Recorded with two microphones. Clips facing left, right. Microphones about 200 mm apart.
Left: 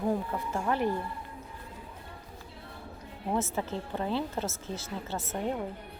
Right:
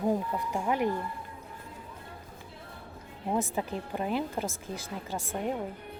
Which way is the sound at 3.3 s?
15° right (ahead or behind).